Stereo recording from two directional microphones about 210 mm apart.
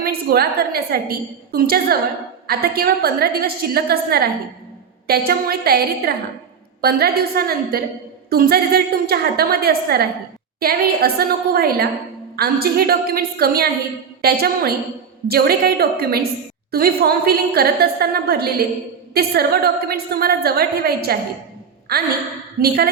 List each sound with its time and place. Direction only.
0.0 s a woman's voice: 45° right (ahead or behind)